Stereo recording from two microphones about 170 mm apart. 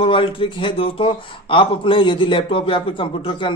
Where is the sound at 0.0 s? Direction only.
30° left (ahead or behind).